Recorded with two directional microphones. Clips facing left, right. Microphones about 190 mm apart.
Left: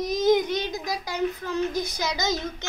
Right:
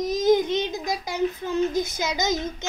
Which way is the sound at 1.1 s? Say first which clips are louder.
Right 2 dB; 20° right (ahead or behind).